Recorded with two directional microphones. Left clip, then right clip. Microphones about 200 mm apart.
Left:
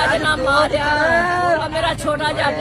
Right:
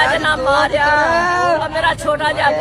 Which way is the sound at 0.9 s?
25° right (ahead or behind).